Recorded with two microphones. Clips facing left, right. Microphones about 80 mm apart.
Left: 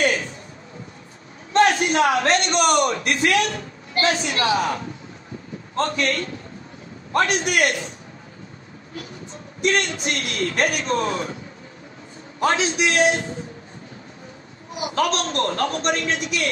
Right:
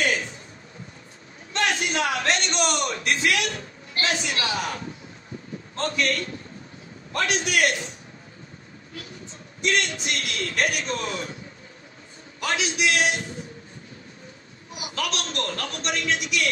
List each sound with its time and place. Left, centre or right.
1.5 s a man's voice: left
5.8 s a man's voice: left
9.6 s a man's voice: left
12.4 s a man's voice: left
14.8 s a man's voice: left